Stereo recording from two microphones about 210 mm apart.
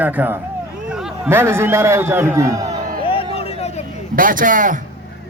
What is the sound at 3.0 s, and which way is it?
Vehicle, 25° left (ahead or behind).